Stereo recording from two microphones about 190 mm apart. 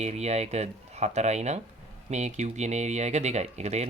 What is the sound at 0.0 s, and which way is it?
Speech, 35° right (ahead or behind).